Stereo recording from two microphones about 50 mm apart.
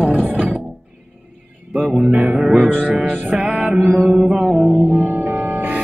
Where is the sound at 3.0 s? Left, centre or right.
Right.